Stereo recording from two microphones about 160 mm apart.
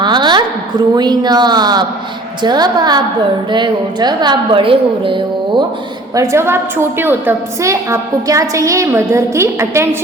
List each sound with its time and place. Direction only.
0.0 s a sound: 30° right (ahead or behind)
0.9 s a woman's voice: 25° right (ahead or behind)
6.1 s a woman's voice: 15° right (ahead or behind)